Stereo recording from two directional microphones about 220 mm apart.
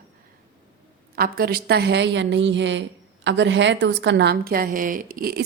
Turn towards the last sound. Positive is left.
turn(degrees=-40)  # may be behind; listen again after turning